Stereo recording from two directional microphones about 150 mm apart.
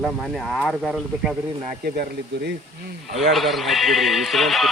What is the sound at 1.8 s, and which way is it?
Speech, 90° right.